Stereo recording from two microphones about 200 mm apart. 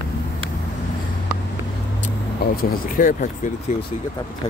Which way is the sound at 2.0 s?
45° left (ahead or behind).